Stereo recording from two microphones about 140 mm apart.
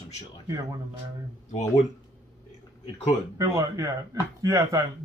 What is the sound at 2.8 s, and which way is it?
Speech, 50° left (ahead or behind).